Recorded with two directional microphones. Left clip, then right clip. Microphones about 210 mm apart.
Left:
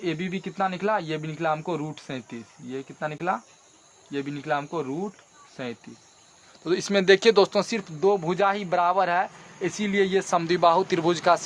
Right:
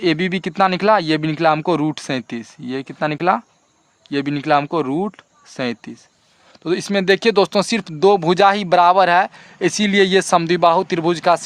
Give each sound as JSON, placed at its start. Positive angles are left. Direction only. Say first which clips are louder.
{"t": 0.0, "sound": "speech", "louder": "right 11 dB", "side_deg": -50}
{"t": 6.7, "sound": "speech", "louder": "right 3 dB", "side_deg": -35}